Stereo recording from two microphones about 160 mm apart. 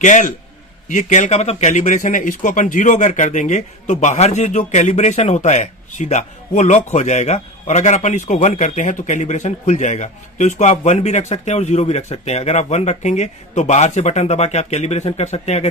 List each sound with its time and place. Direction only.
0.0 s speech: 50° left (ahead or behind)